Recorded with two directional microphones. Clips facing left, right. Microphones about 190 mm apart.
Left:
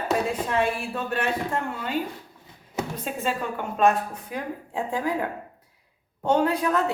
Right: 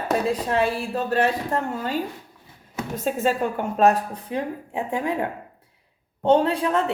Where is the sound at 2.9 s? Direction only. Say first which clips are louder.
Right 9 dB; 40° right (ahead or behind).